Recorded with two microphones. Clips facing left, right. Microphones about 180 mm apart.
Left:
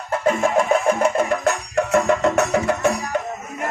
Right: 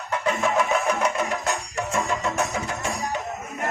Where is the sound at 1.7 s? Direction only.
65° left (ahead or behind).